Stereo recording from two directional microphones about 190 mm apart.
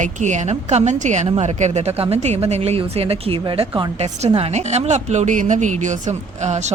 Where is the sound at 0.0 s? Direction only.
40° right (ahead or behind).